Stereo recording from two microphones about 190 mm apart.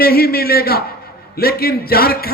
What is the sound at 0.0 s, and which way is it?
A man's voice, 55° left (ahead or behind).